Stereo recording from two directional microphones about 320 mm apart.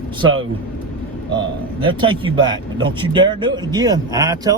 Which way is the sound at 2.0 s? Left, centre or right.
Centre.